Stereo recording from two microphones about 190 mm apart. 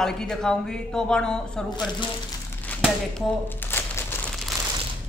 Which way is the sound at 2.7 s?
5° left (ahead or behind).